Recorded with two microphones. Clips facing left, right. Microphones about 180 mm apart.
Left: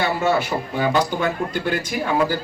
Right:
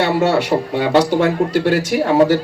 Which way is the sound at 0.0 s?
85° right.